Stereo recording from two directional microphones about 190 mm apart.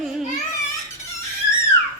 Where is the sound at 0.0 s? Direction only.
Centre (ahead or behind).